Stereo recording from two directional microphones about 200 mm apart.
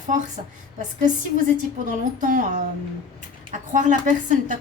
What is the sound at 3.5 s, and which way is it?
A woman's voice, 40° right (ahead or behind).